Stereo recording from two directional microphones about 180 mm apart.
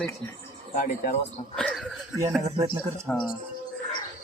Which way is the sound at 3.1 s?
10° left (ahead or behind).